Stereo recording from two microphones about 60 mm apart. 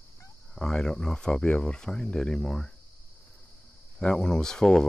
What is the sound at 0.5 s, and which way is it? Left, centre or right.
Speech, centre.